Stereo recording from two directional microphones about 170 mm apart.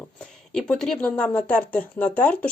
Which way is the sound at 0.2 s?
5° left (ahead or behind).